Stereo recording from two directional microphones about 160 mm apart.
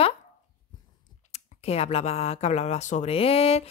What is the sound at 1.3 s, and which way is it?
Speech, 40° left (ahead or behind).